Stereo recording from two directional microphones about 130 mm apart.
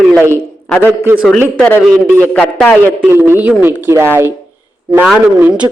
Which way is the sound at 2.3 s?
10° left (ahead or behind).